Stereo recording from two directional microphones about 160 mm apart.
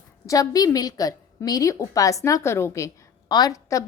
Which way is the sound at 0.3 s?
25° left (ahead or behind).